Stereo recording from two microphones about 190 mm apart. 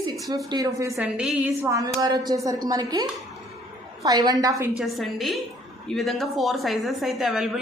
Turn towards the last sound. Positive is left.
turn(degrees=0)  # may be behind; listen again after turning